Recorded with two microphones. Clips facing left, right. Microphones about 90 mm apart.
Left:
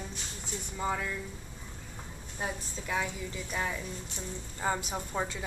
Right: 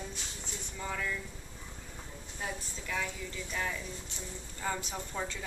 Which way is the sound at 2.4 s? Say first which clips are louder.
Left 3 dB; 25° left (ahead or behind).